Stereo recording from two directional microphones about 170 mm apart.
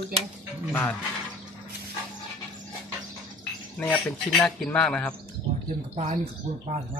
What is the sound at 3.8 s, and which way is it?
Speech, 10° left (ahead or behind).